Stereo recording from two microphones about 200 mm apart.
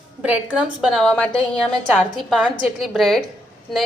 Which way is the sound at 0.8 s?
Centre (ahead or behind).